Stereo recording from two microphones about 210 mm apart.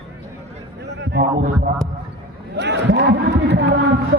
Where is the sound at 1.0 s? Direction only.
55° right (ahead or behind).